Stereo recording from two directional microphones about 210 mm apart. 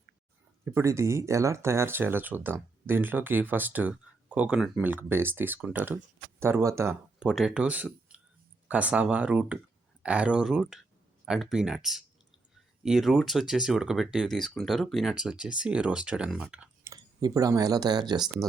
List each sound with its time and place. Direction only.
0.6 s speech: 15° right (ahead or behind)
16.9 s speech: 15° right (ahead or behind)